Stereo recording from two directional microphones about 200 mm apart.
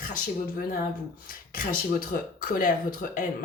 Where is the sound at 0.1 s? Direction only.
45° left (ahead or behind).